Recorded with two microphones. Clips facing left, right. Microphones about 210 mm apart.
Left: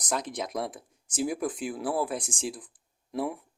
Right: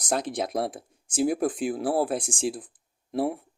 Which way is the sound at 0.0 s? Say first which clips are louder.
Right 4 dB; 30° right (ahead or behind).